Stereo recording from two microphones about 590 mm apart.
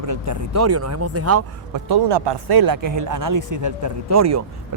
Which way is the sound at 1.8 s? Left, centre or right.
Right.